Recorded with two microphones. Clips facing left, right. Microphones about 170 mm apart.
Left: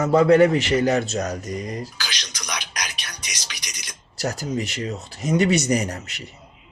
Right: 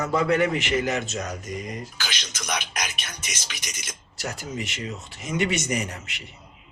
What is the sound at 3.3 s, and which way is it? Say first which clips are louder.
Speech: right 1 dB; 50° right (ahead or behind).